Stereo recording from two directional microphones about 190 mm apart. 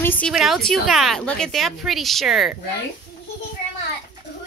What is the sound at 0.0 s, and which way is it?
Speech, 10° left (ahead or behind).